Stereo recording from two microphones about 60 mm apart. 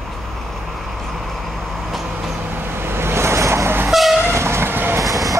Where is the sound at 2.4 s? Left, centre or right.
Right.